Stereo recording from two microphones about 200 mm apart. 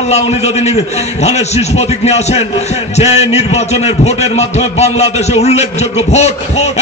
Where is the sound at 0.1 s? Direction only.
35° left (ahead or behind).